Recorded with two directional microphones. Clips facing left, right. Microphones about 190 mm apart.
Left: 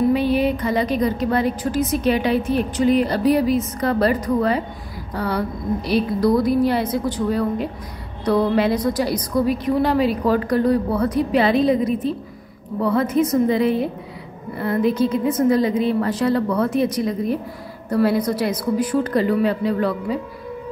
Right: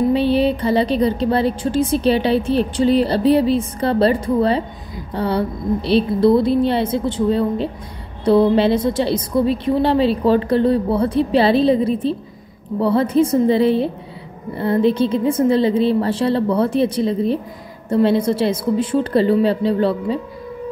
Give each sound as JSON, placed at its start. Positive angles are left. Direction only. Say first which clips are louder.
{"t": 0.1, "sound": "a woman's voice", "louder": "right 2 dB", "side_deg": -30}